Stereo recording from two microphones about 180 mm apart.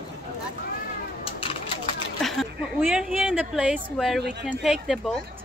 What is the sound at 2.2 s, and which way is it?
A woman's voice, centre (ahead or behind).